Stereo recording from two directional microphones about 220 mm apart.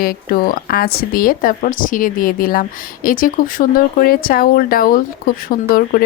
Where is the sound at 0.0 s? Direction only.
40° left (ahead or behind).